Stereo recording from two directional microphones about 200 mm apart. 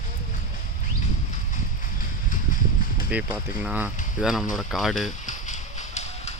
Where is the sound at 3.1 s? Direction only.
10° right (ahead or behind).